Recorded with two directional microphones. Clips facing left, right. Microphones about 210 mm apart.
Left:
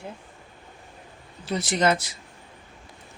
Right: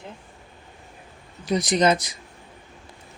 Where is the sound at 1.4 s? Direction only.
15° right (ahead or behind).